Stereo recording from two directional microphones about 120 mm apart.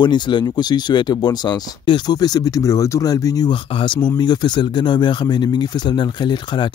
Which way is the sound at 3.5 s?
45° left (ahead or behind).